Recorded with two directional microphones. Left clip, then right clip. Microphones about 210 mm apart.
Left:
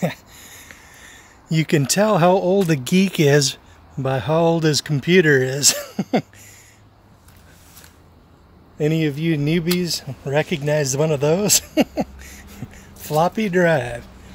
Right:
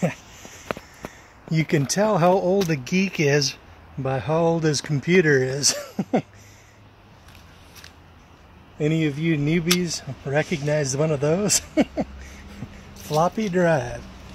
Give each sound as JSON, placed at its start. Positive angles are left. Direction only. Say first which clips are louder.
{"t": 0.0, "sound": "a sound", "louder": "left 2 dB", "side_deg": 10}
{"t": 1.1, "sound": "speech", "louder": "left 3 dB", "side_deg": 25}
{"t": 2.7, "sound": "speech", "louder": "left 4 dB", "side_deg": 45}
{"t": 4.0, "sound": "speech", "louder": "left 4 dB", "side_deg": 30}
{"t": 5.9, "sound": "a sound", "louder": "left 2 dB", "side_deg": 35}
{"t": 8.7, "sound": "speech", "louder": "left 3 dB", "side_deg": 20}